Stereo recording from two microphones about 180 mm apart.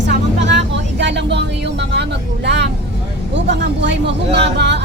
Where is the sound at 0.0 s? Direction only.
80° right.